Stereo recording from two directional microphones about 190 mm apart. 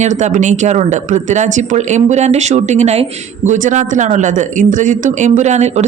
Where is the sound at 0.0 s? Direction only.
40° right (ahead or behind).